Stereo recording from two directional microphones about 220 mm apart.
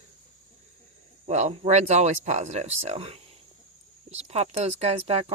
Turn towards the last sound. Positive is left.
turn(degrees=-30)  # may be behind; listen again after turning